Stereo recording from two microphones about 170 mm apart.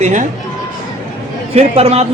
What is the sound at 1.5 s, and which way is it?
Speech, 40° right (ahead or behind).